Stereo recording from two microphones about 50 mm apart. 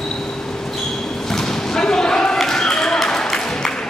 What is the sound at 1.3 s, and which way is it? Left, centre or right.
Basketball bounce, centre.